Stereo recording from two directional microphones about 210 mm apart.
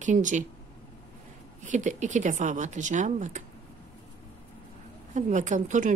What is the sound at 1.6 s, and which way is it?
A woman's voice, 35° right (ahead or behind).